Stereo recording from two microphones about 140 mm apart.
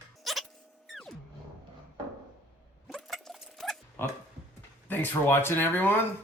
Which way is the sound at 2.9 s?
Centre (ahead or behind).